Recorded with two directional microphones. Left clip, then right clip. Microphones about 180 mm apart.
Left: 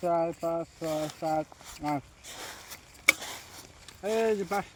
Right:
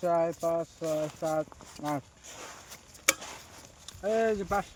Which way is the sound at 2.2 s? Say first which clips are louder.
Left 3 dB; 45° left (ahead or behind).